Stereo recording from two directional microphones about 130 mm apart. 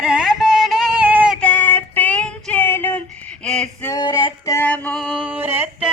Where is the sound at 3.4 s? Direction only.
5° left (ahead or behind).